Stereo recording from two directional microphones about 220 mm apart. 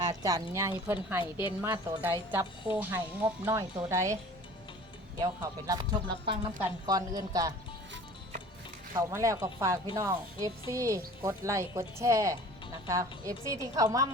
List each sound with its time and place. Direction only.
0.0 s speech: 15° right (ahead or behind)
5.2 s speech: 15° right (ahead or behind)
9.0 s speech: 15° right (ahead or behind)